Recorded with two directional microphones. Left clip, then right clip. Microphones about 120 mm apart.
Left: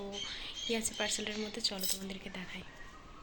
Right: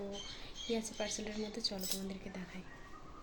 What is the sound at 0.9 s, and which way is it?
A woman's voice, 5° left (ahead or behind).